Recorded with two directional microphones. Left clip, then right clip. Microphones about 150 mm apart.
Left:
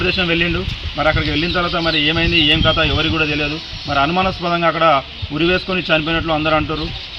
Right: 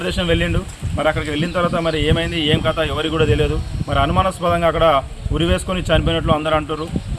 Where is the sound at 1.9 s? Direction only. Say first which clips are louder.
Left 4 dB; 35° right (ahead or behind).